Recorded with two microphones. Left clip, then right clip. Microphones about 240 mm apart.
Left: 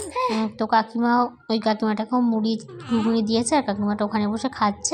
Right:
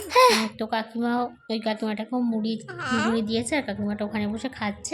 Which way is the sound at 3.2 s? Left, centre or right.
Centre.